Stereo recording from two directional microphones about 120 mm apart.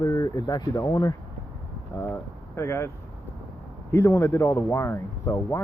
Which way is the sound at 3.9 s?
20° left (ahead or behind).